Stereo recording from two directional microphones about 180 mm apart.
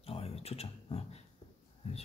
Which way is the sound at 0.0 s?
35° left (ahead or behind).